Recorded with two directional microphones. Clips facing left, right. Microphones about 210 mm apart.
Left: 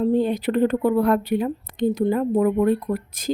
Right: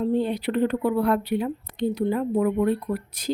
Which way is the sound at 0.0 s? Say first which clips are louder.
Left 3 dB; 45° left (ahead or behind).